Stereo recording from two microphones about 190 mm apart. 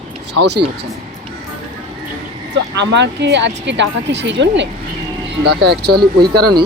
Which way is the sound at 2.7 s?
65° right (ahead or behind).